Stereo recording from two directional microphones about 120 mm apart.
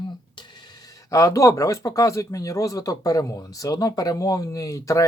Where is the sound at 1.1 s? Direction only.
25° left (ahead or behind).